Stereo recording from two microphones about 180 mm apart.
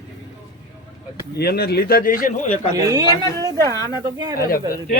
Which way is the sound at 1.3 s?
60° left (ahead or behind).